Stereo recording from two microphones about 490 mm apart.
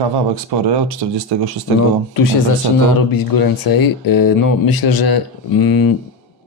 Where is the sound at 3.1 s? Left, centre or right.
Left.